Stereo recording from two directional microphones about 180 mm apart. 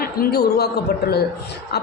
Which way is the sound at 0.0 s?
60° left (ahead or behind).